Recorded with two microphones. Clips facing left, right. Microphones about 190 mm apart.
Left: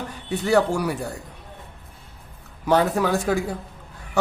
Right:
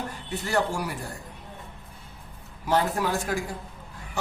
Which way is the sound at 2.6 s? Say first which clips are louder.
Left 5 dB; 65° left (ahead or behind).